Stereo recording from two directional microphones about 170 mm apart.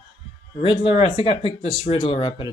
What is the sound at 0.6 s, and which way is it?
Speech, 30° left (ahead or behind).